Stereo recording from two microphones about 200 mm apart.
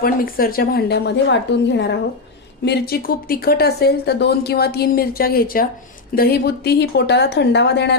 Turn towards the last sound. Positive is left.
turn(degrees=55)  # may be behind; listen again after turning